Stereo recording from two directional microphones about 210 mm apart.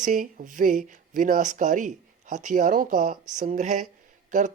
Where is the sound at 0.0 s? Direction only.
40° right (ahead or behind).